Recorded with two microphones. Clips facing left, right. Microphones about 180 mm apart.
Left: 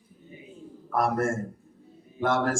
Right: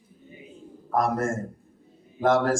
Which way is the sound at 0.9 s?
40° right (ahead or behind).